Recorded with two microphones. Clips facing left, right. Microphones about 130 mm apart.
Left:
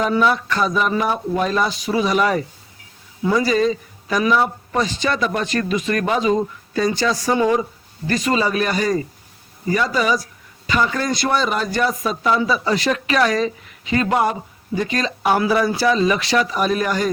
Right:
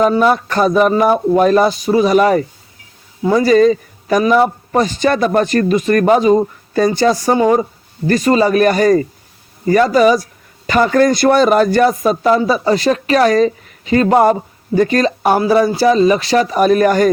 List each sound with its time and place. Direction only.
0.0 s a man's voice: 45° right (ahead or behind)